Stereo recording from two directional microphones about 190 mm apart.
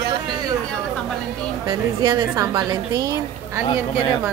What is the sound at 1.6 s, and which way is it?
A woman's voice, 20° right (ahead or behind).